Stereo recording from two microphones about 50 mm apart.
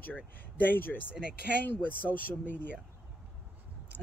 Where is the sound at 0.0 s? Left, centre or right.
Left.